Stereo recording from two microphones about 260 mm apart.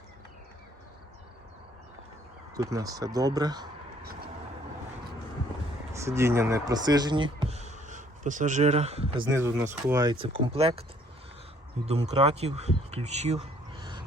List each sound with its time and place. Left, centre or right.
2.6 s speech: centre
5.9 s speech: centre
9.3 s speech: centre
11.9 s speech: right
12.9 s a sound: right